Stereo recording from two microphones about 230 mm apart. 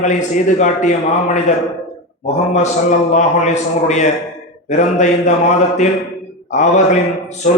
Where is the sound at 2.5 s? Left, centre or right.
Left.